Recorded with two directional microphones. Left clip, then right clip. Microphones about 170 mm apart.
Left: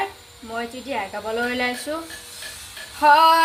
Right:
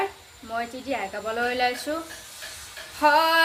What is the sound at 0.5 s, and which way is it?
Speech, 20° right (ahead or behind).